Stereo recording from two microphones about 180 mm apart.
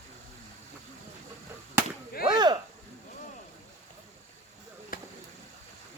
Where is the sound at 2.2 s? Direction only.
25° right (ahead or behind).